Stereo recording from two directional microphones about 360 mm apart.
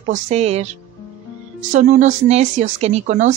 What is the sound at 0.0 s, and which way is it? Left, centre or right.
A woman's voice, centre.